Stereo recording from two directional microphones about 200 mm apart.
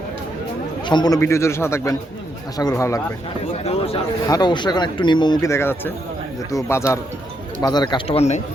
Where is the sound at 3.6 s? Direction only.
30° left (ahead or behind).